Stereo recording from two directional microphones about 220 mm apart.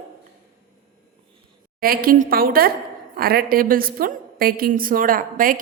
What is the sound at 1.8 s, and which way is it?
A woman's voice, 40° right (ahead or behind).